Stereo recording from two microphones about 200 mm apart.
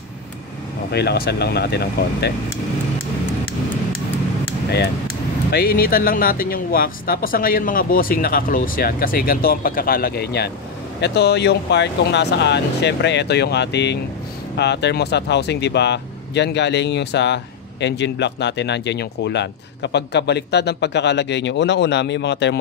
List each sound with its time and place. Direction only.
0.9 s speech: 50° left (ahead or behind)
5.5 s speech: 50° left (ahead or behind)